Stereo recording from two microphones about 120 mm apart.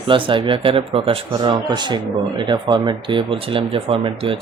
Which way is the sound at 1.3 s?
35° right (ahead or behind).